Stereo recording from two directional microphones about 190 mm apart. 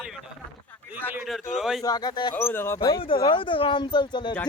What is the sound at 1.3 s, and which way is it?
Speech, centre (ahead or behind).